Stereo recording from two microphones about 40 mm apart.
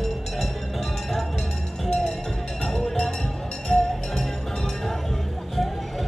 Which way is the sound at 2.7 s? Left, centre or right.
Centre.